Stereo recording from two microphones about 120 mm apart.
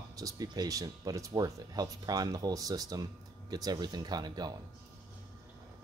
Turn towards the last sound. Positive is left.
turn(degrees=-35)  # may be behind; listen again after turning